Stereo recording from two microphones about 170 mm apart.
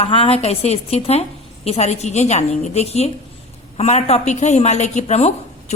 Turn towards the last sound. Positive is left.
turn(degrees=40)  # may be behind; listen again after turning